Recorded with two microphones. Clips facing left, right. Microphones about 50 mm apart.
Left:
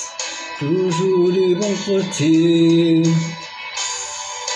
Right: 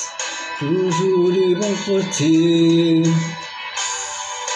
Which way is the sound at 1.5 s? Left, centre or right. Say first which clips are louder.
Even; right.